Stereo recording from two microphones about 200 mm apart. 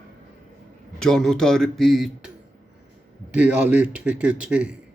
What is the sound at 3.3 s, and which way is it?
A man's voice, 5° right (ahead or behind).